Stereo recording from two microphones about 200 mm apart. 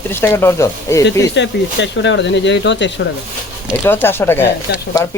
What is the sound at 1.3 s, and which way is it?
Speech, 60° left (ahead or behind).